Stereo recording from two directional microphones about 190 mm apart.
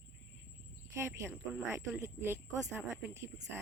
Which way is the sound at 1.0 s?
15° right (ahead or behind).